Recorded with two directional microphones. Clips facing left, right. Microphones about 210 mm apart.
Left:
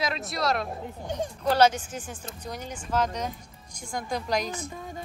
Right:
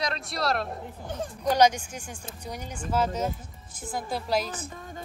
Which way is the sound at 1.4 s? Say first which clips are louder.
Even; 10° right (ahead or behind).